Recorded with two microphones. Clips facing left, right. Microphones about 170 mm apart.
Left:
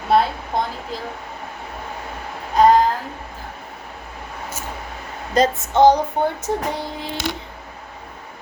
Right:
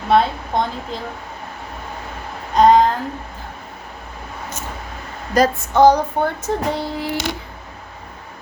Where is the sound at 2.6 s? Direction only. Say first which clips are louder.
Right 2 dB; centre (ahead or behind).